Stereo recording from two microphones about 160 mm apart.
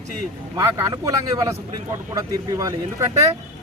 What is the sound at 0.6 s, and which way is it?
Speech, 20° right (ahead or behind).